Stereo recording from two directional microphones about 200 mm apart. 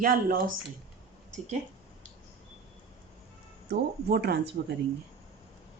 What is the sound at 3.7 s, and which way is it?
Speech, 55° right (ahead or behind).